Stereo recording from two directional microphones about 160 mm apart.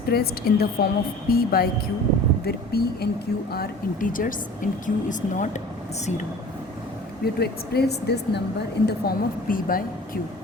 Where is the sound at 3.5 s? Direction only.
65° left (ahead or behind); by 6.2 s 45° left (ahead or behind).